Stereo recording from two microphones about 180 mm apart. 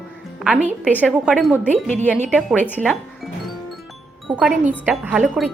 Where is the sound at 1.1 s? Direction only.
5° right (ahead or behind).